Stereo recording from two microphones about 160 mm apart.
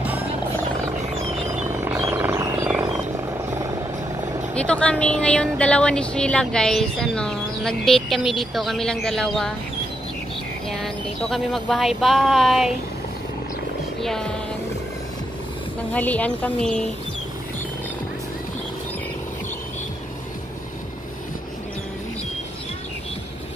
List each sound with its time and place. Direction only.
1.9 s helicopter: 15° right (ahead or behind)
4.6 s speech: 5° left (ahead or behind)
10.7 s speech: centre (ahead or behind)
14.0 s speech: 5° left (ahead or behind)
15.9 s speech: 10° left (ahead or behind)